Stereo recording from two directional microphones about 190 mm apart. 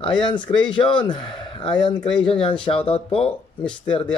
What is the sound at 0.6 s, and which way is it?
Speech, 25° left (ahead or behind).